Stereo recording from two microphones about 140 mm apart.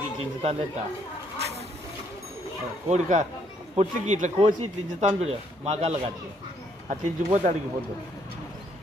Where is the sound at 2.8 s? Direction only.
60° right (ahead or behind).